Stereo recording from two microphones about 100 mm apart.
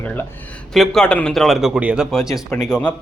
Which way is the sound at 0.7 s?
5° left (ahead or behind).